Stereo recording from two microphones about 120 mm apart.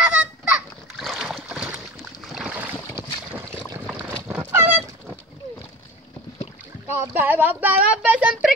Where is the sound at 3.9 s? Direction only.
10° right (ahead or behind).